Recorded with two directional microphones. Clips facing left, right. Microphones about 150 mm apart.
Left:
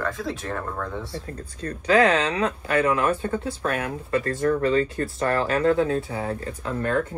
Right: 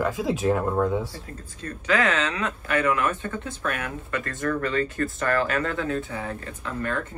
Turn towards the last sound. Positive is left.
turn(degrees=35)  # may be behind; listen again after turning